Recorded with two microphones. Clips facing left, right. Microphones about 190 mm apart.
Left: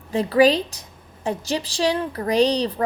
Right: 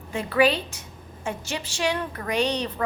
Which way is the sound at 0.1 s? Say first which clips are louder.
Left 5 dB; 35° left (ahead or behind).